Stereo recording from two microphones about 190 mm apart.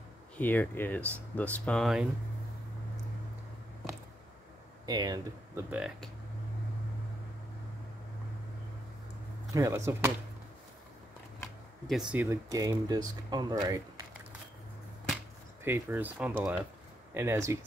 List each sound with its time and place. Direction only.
0.4 s speech: 10° left (ahead or behind)
4.8 s speech: 20° right (ahead or behind)
5.7 s speech: 5° right (ahead or behind)
9.5 s speech: 15° right (ahead or behind)
11.9 s speech: 5° right (ahead or behind); by 14.0 s 20° right (ahead or behind)
15.6 s speech: 10° right (ahead or behind)